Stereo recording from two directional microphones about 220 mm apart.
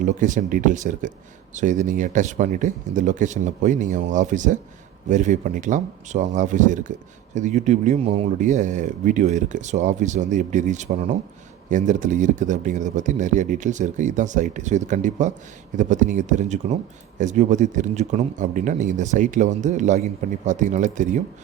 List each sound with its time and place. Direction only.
0.0 s a man's voice: 35° right (ahead or behind)